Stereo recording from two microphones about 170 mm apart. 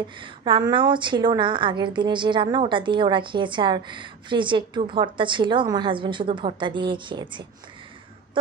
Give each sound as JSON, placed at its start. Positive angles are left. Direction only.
{"t": 0.2, "sound": "a woman's voice", "side_deg": -30}